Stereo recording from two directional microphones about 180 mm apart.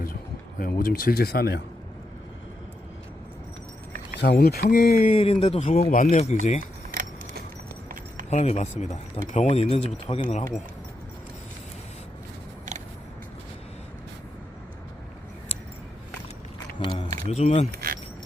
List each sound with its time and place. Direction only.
0.6 s speech: 50° left (ahead or behind)
4.2 s speech: 65° left (ahead or behind)
5.0 s speech: 35° left (ahead or behind)
6.9 s keys jangling: 60° right (ahead or behind)
8.3 s speech: 40° left (ahead or behind)
16.8 s a sound: 25° left (ahead or behind)
17.2 s speech: 40° left (ahead or behind)
17.7 s speech: 55° right (ahead or behind)